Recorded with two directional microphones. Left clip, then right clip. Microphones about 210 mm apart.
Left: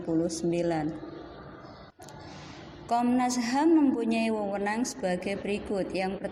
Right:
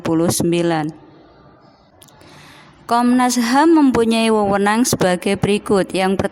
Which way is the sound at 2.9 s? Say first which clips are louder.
Right 11 dB; 35° right (ahead or behind).